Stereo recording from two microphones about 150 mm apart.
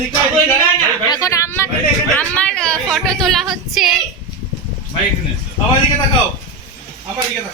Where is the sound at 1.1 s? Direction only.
20° left (ahead or behind); by 3.9 s centre (ahead or behind).